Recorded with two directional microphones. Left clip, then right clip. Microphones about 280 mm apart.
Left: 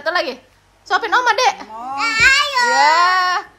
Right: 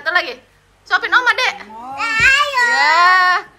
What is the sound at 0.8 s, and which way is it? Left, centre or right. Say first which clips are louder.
Speech: right 1 dB; left.